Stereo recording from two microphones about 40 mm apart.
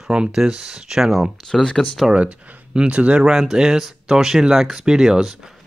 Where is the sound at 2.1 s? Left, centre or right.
Right.